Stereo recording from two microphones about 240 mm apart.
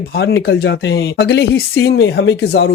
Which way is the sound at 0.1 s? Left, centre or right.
Left.